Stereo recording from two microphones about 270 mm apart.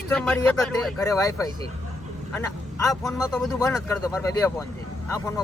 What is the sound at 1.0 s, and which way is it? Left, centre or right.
Speech, centre.